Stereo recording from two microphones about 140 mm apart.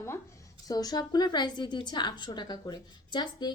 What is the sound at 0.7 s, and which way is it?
A woman's voice, 25° left (ahead or behind).